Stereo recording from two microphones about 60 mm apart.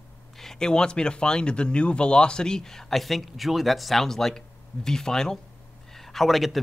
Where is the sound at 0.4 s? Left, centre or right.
Centre.